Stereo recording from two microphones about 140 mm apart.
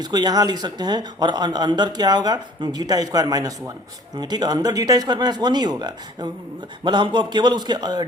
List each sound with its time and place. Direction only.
0.0 s speech: 30° right (ahead or behind)